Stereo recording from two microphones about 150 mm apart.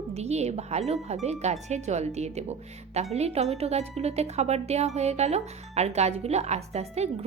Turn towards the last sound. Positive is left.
turn(degrees=-45)  # may be behind; listen again after turning